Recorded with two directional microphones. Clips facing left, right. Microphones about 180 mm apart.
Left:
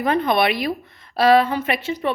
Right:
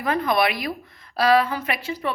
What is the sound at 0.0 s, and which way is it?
A woman's voice, 25° left (ahead or behind).